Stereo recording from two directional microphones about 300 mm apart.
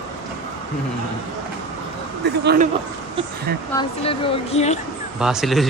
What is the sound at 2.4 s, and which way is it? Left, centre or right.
Speech, right.